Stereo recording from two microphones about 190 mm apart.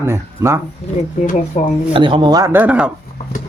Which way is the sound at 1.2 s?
40° left (ahead or behind).